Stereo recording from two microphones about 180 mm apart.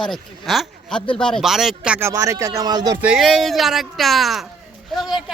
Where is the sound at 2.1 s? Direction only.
15° right (ahead or behind).